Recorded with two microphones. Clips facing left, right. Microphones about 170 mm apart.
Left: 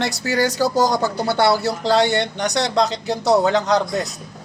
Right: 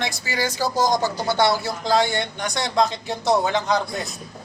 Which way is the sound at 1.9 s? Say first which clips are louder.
Left 4 dB; 75° left (ahead or behind).